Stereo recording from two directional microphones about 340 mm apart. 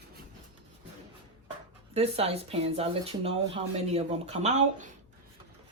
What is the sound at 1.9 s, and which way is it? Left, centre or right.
Speech, centre.